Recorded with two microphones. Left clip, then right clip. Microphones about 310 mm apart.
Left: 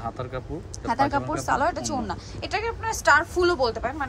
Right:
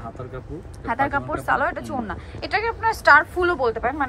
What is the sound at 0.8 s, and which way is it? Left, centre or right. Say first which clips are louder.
A woman's voice: right 1 dB; centre.